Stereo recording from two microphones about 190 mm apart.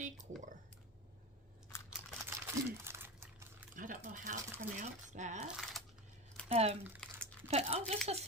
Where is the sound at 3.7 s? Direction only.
45° right (ahead or behind).